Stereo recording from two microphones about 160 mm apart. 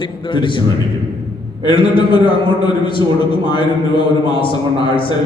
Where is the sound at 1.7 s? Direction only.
30° left (ahead or behind).